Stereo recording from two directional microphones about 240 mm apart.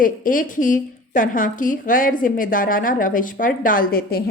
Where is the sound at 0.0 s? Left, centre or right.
Left.